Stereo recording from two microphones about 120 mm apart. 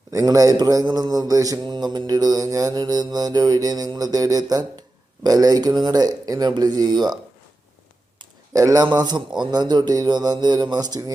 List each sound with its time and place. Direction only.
0.1 s mantra: 30° right (ahead or behind)
8.2 s mantra: 30° right (ahead or behind)